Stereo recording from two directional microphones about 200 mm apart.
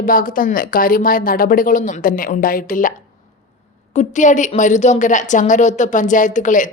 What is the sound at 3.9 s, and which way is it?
A woman's voice, 40° left (ahead or behind).